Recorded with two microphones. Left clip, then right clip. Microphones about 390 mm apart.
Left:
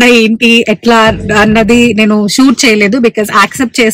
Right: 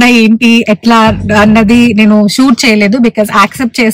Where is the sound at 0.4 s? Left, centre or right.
Left.